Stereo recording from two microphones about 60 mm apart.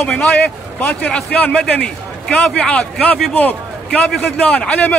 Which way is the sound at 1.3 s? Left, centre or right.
Left.